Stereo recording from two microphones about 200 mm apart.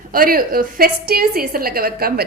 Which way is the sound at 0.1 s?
45° right (ahead or behind).